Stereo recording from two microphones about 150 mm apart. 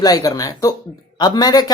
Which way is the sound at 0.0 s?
25° left (ahead or behind).